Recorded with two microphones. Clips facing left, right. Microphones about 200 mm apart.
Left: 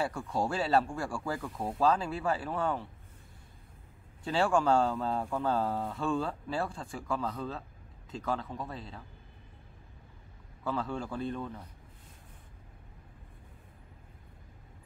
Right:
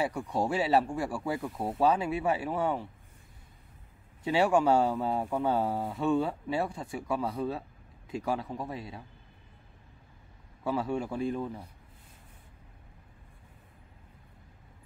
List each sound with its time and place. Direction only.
0.3 s speech: 5° right (ahead or behind)
0.8 s speech: 20° right (ahead or behind)
1.6 s speech: 5° right (ahead or behind)
4.2 s speech: 5° right (ahead or behind)
4.8 s speech: 20° right (ahead or behind)
10.6 s speech: 10° right (ahead or behind)